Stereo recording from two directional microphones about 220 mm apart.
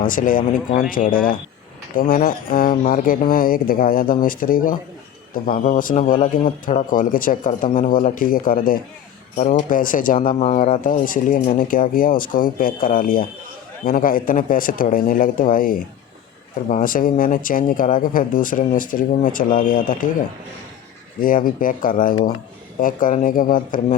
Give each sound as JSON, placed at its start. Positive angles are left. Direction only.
{"t": 0.1, "sound": "a man's voice", "side_deg": 40}
{"t": 21.2, "sound": "a man's voice", "side_deg": 40}